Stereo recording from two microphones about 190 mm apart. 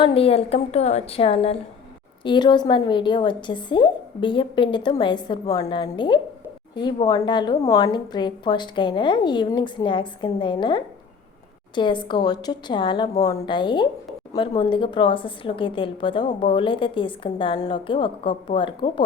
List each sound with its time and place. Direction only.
0.0 s a woman's voice: 30° left (ahead or behind)